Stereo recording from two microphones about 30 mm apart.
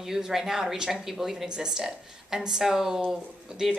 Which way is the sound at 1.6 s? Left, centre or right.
Centre.